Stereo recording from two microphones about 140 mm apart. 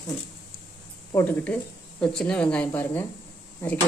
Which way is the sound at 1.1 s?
10° left (ahead or behind).